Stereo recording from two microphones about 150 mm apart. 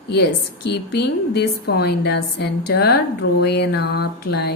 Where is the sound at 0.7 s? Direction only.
90° left.